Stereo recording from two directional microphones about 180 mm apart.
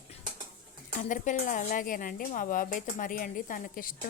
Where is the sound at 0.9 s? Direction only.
45° left (ahead or behind).